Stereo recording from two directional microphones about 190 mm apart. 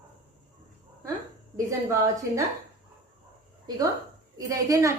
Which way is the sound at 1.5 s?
15° right (ahead or behind).